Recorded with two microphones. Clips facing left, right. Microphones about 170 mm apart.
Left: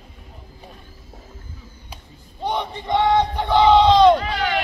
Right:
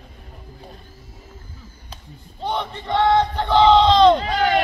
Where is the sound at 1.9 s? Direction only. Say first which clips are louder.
Right 2 dB; 15° left (ahead or behind).